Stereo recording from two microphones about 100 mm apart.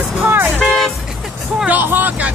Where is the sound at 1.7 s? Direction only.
20° right (ahead or behind).